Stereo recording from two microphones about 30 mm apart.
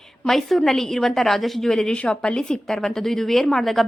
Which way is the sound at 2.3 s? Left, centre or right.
Left.